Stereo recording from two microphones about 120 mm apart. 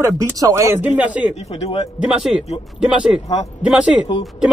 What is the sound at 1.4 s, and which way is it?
Speech, 55° left (ahead or behind).